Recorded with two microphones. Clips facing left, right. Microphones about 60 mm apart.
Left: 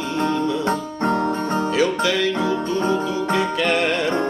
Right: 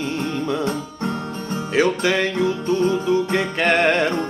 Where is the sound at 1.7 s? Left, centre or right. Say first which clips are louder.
Right 4 dB; right.